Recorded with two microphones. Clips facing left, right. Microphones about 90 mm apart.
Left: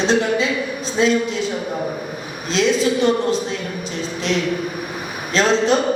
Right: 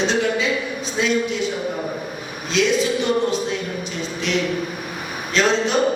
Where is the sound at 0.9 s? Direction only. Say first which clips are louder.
Left 3 dB; 35° left (ahead or behind).